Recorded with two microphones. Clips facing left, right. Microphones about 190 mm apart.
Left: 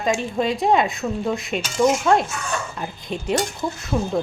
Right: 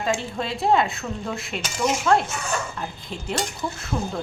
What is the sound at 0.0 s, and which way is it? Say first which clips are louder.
A woman's voice: left 4 dB; 15° left (ahead or behind).